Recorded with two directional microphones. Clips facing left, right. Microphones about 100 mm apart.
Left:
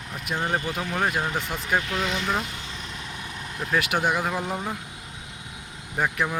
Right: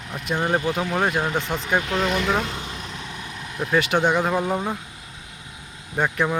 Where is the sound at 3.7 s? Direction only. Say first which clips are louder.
Right 4 dB; 5° left (ahead or behind).